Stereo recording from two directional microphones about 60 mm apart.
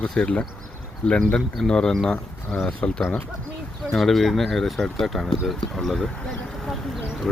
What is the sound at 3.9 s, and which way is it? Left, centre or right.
Speech, centre.